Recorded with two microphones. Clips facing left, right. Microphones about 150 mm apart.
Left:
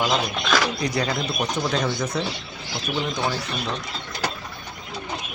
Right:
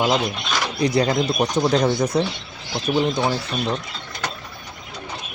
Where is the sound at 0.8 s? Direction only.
30° right (ahead or behind).